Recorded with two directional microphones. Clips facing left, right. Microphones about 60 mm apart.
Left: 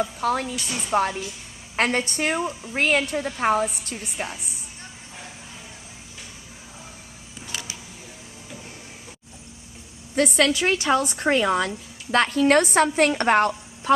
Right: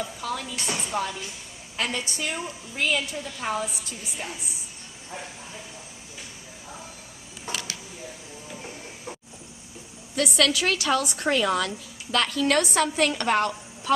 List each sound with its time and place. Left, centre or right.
0.0 s a woman's voice: left
0.5 s speech: right
0.9 s a woman's voice: left
7.5 s a sound: right
10.2 s a woman's voice: left